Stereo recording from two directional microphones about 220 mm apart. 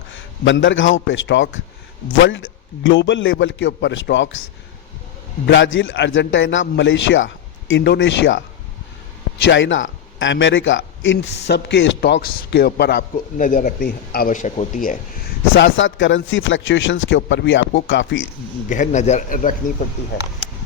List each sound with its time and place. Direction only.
0.1 s a man's voice: 55° left (ahead or behind)
5.5 s speech: 60° left (ahead or behind)
9.5 s a man's voice: 60° left (ahead or behind); by 14.8 s 25° left (ahead or behind)
15.5 s speech: 60° left (ahead or behind)
18.7 s speech: 35° left (ahead or behind)